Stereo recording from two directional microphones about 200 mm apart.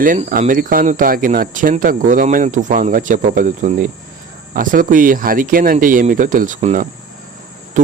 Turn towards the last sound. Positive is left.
turn(degrees=-40)  # may be behind; listen again after turning